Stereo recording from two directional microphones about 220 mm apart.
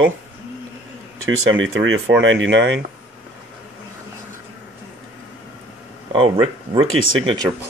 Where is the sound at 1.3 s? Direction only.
65° right (ahead or behind).